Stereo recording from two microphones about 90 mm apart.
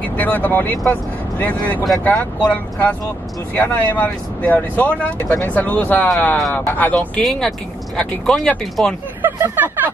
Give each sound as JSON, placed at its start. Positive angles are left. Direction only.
{"t": 0.0, "sound": "speech", "side_deg": 20}
{"t": 7.2, "sound": "speech", "side_deg": 5}
{"t": 9.2, "sound": "speech", "side_deg": -20}